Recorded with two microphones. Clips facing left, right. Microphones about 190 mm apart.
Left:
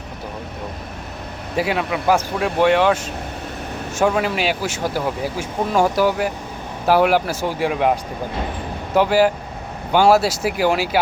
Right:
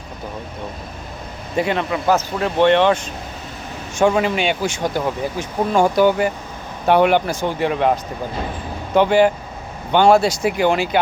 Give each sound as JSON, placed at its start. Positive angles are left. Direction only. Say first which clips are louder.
{"t": 1.5, "sound": "speech", "louder": "right 1 dB", "side_deg": 5}
{"t": 9.0, "sound": "speech", "louder": "right 2 dB", "side_deg": 5}